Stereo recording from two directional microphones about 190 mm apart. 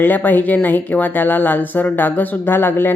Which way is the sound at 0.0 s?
10° left (ahead or behind).